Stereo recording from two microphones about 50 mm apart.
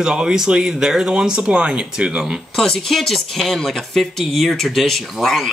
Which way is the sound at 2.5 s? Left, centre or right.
Centre.